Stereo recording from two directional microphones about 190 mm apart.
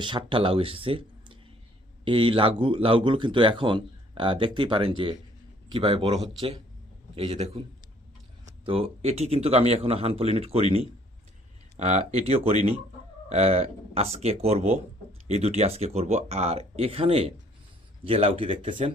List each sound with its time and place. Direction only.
0.0 s speech: 25° right (ahead or behind)
8.6 s speech: 30° right (ahead or behind)